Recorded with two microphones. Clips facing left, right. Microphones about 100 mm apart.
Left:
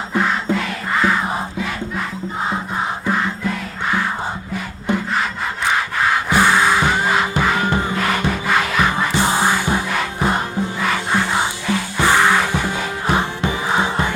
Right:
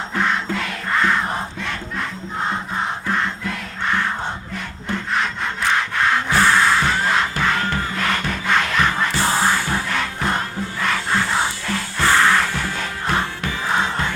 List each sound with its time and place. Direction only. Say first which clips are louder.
0.1 s music: left 3 dB; 5° left (ahead or behind)
3.1 s music: left 4 dB; 5° left (ahead or behind)
4.5 s music: left 5 dB; 5° left (ahead or behind)
5.6 s wood: left 1 dB; 5° left (ahead or behind)
6.3 s music: left 2 dB; 10° left (ahead or behind)
7.9 s rub: left 3 dB; 5° left (ahead or behind)
8.2 s music: left 2 dB; 5° left (ahead or behind)
9.1 s music: left 3 dB; 15° left (ahead or behind)
10.8 s music: even; 10° left (ahead or behind)